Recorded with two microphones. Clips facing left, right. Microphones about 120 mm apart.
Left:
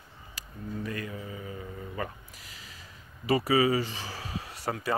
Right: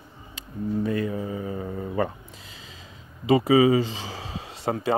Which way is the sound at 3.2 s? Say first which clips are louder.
Right 6 dB; 20° right (ahead or behind).